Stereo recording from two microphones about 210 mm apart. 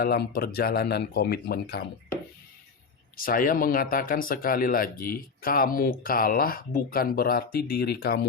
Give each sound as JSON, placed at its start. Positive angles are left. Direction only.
{"t": 0.0, "sound": "speech", "side_deg": 45}
{"t": 3.2, "sound": "speech", "side_deg": 45}